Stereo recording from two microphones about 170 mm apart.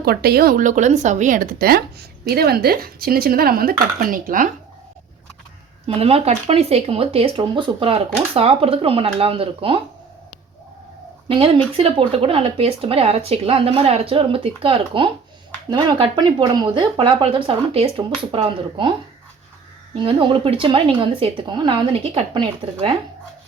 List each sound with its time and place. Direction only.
0.0 s speech: 65° right (ahead or behind)
5.8 s speech: 35° right (ahead or behind)
11.3 s speech: 30° right (ahead or behind)
20.0 s speech: 30° right (ahead or behind)